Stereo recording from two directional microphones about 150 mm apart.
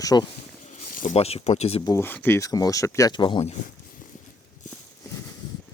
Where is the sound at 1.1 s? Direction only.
40° left (ahead or behind).